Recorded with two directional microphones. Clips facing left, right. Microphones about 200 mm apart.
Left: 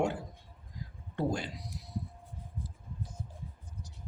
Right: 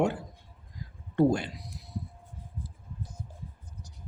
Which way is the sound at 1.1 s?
60° right (ahead or behind).